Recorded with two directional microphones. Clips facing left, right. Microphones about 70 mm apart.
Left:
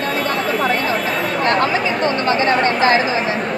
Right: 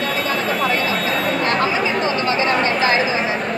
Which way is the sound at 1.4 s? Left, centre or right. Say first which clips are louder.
Left 2 dB; left.